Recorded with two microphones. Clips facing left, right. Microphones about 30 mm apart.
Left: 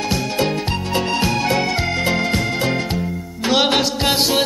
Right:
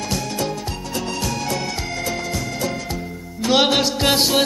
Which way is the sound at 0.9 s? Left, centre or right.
Left.